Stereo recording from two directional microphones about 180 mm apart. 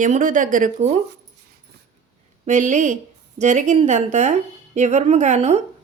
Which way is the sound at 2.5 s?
40° right (ahead or behind).